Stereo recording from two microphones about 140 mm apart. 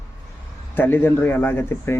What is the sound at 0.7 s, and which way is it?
Speech, 15° left (ahead or behind).